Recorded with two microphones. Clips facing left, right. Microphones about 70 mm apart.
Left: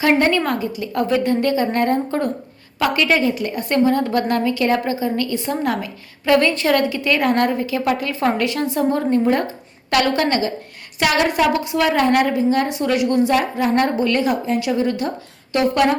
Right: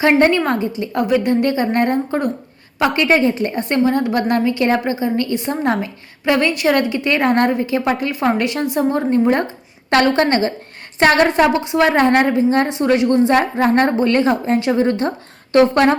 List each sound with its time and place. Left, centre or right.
0.0 s a woman's voice: right